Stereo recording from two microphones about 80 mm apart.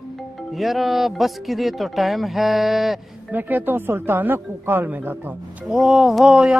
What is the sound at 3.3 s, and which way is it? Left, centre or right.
Speech, right.